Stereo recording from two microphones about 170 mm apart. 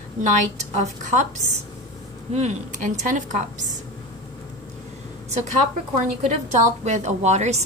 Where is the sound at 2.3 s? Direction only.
45° right (ahead or behind).